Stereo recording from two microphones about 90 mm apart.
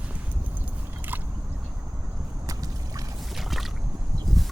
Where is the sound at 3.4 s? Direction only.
Centre (ahead or behind).